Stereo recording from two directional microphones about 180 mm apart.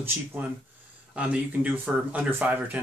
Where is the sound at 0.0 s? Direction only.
10° right (ahead or behind).